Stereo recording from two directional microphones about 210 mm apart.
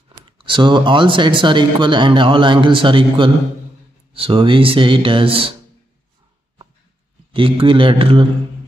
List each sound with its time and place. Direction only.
0.2 s speech: 25° right (ahead or behind)
7.3 s speech: 25° right (ahead or behind)